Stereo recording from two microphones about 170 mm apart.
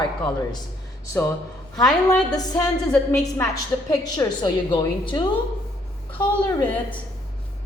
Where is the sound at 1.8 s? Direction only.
5° left (ahead or behind).